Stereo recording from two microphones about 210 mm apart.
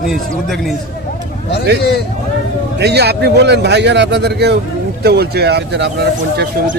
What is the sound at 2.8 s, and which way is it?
A man's voice, 50° right (ahead or behind).